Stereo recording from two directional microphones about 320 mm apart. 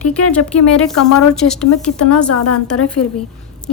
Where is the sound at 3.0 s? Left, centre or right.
Left.